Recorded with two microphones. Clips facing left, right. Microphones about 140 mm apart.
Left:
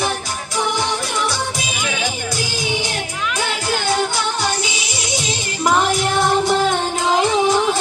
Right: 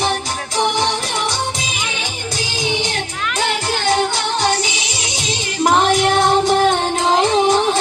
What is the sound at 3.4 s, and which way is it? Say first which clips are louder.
Music: right 3 dB; 20° right (ahead or behind).